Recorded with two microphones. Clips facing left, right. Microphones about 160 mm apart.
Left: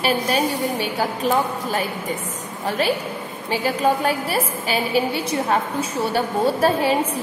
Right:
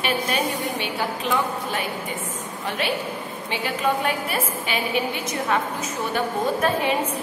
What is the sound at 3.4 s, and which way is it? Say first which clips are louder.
A woman's voice: left 5 dB; 40° left (ahead or behind).